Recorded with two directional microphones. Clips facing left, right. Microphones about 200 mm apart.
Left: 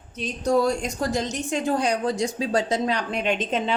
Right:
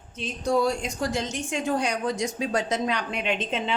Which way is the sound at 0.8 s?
40° left (ahead or behind).